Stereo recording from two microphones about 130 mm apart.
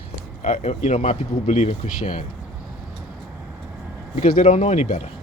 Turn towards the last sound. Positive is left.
turn(degrees=60)  # may be behind; listen again after turning